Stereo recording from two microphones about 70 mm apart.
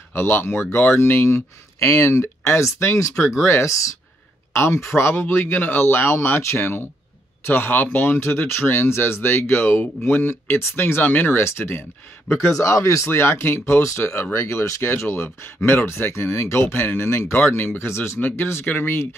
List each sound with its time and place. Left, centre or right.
0.1 s speech: left